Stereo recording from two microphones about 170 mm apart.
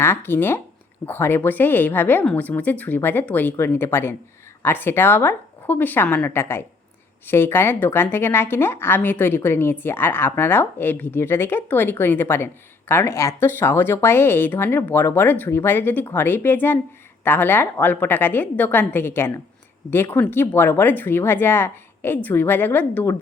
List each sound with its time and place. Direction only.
0.0 s speech: 15° left (ahead or behind)